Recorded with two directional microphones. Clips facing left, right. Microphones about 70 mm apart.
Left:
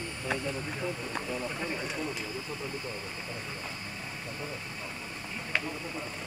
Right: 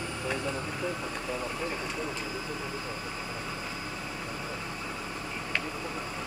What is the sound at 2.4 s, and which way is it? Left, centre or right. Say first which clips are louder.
Vehicle: right 2 dB; right.